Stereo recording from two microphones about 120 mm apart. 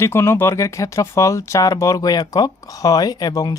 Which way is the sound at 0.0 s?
20° left (ahead or behind).